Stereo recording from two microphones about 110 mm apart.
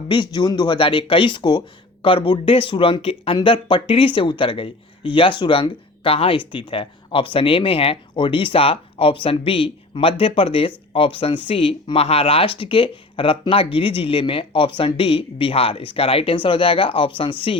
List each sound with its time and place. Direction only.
0.1 s speech: 45° left (ahead or behind)